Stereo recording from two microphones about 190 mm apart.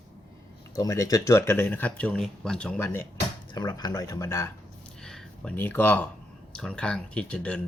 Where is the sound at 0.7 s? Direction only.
15° left (ahead or behind).